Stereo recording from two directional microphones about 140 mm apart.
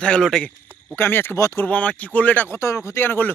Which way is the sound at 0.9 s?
15° left (ahead or behind).